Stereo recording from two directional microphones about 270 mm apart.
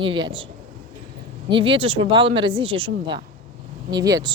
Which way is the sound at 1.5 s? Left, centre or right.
Centre.